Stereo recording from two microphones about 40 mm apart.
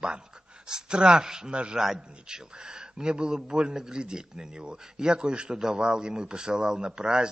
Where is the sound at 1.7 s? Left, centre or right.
Centre.